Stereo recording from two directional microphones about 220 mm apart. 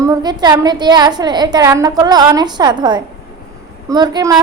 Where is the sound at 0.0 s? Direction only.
15° right (ahead or behind).